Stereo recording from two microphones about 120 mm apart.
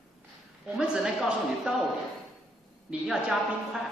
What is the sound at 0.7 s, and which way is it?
A woman's voice, 5° right (ahead or behind).